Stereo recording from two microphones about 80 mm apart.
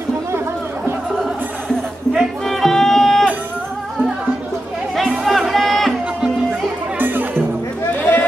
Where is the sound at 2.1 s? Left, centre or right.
Centre.